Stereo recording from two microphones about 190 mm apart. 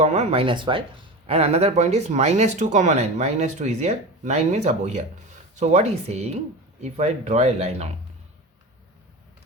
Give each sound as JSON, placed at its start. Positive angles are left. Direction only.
{"t": 0.0, "sound": "speech", "side_deg": -35}